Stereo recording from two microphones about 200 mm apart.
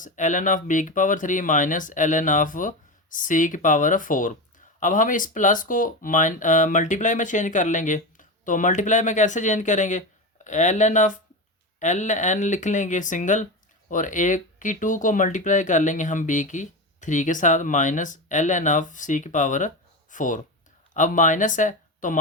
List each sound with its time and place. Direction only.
0.0 s speech: 40° left (ahead or behind)